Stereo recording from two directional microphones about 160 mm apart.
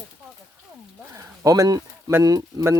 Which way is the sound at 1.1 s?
20° right (ahead or behind).